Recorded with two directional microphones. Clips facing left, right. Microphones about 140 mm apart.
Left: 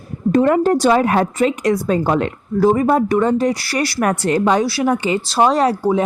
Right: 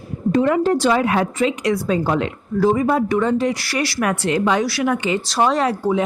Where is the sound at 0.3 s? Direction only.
50° left (ahead or behind).